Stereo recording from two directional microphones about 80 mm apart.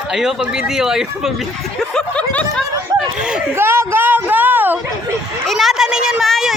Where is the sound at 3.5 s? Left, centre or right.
Right.